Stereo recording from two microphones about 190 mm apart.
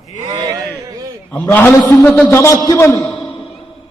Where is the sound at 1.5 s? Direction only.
10° left (ahead or behind).